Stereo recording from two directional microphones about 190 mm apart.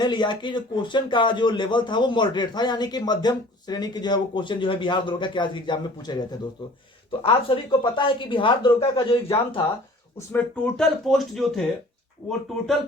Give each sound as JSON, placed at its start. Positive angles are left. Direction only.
{"t": 0.0, "sound": "a man's voice", "side_deg": 25}
{"t": 10.2, "sound": "speech", "side_deg": 10}